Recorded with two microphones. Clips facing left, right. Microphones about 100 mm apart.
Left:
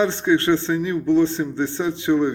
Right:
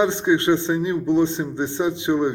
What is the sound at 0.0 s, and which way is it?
A man's voice, 20° right (ahead or behind).